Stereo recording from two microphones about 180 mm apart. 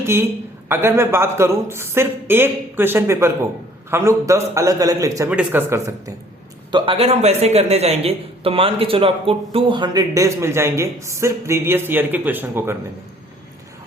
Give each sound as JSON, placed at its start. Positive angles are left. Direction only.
{"t": 0.0, "sound": "a woman's voice", "side_deg": -15}
{"t": 6.7, "sound": "a man's voice", "side_deg": -25}